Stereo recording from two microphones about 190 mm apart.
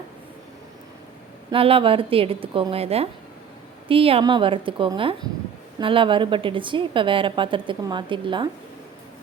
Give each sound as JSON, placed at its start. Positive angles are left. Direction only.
{"t": 1.5, "sound": "a woman's voice", "side_deg": -30}